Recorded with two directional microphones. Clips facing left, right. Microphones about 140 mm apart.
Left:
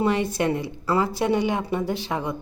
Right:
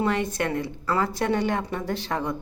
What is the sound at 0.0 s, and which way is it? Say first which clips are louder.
A woman's voice: left 3 dB; 15° left (ahead or behind).